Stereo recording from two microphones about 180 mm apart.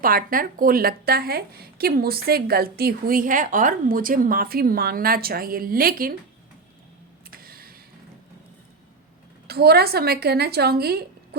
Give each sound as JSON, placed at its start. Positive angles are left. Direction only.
{"t": 0.0, "sound": "speech", "side_deg": -55}
{"t": 7.3, "sound": "a sound", "side_deg": -55}
{"t": 9.5, "sound": "speech", "side_deg": -60}